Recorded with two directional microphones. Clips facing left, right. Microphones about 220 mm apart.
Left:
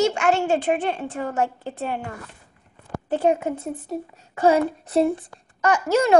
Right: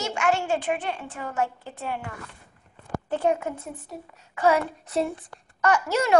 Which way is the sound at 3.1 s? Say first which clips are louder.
Left 4 dB; 20° left (ahead or behind).